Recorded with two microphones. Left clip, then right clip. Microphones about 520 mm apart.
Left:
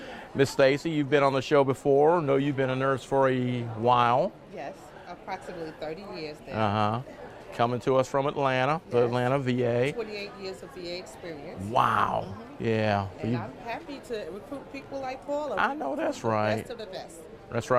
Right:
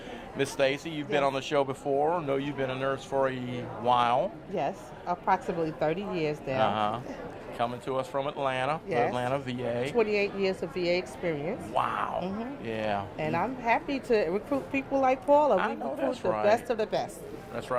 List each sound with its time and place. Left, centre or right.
0.3 s speech: left
4.5 s a woman's voice: right
6.6 s speech: left
10.0 s speech: right
11.7 s speech: left
13.3 s speech: right
15.5 s speech: left
16.5 s a woman's voice: right
17.5 s a man's voice: left